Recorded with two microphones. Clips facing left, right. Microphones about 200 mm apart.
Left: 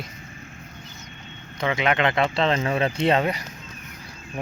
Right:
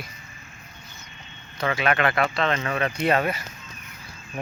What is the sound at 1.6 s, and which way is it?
Speech, 20° left (ahead or behind).